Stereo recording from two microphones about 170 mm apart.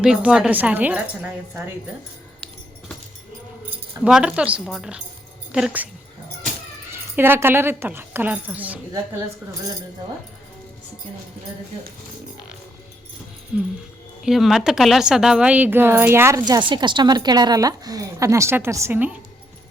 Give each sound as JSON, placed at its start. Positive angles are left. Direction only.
{"t": 0.0, "sound": "a woman's voice", "side_deg": -5}
{"t": 4.0, "sound": "a woman's voice", "side_deg": -5}
{"t": 6.9, "sound": "a woman's voice", "side_deg": -15}
{"t": 14.2, "sound": "a woman's voice", "side_deg": 0}